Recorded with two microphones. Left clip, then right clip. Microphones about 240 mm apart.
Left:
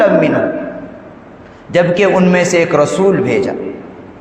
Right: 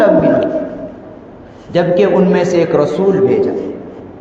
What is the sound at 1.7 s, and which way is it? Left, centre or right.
A man's voice, left.